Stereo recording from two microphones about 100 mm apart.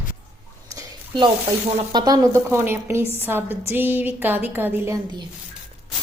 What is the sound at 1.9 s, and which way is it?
A woman's voice, 40° right (ahead or behind).